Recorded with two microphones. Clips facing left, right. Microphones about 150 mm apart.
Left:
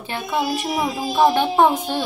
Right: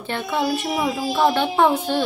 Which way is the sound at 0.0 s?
10° left (ahead or behind).